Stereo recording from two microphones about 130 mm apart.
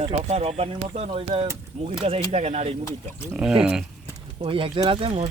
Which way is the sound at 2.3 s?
60° right (ahead or behind).